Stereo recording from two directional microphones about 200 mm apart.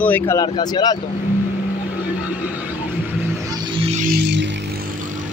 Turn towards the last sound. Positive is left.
turn(degrees=-55)  # may be behind; listen again after turning